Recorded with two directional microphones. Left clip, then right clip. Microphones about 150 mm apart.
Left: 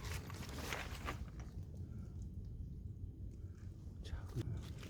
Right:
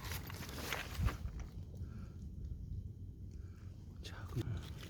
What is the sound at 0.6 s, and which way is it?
Walk, 25° right (ahead or behind).